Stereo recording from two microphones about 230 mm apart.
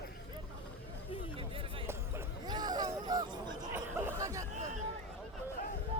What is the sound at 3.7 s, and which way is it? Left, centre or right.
Chatter, centre.